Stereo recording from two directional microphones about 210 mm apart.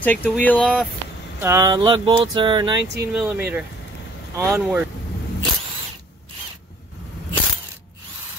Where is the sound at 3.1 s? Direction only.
5° right (ahead or behind).